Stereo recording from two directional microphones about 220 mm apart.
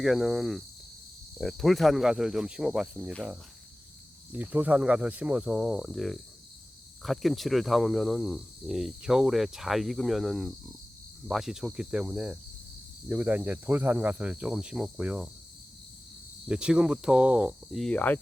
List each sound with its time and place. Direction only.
0.0 s speech: centre (ahead or behind)
4.3 s speech: 10° right (ahead or behind)
16.5 s speech: 5° right (ahead or behind)